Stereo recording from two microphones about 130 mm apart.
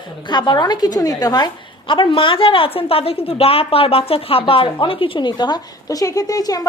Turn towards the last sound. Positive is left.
turn(degrees=30)  # may be behind; listen again after turning